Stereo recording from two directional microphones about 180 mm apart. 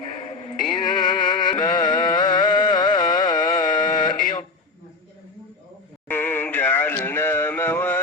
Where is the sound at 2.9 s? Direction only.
25° left (ahead or behind).